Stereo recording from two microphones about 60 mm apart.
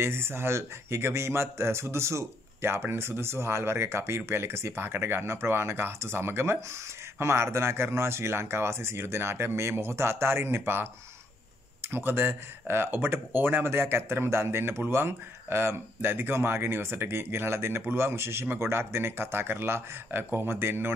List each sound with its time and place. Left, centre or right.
0.0 s speech: right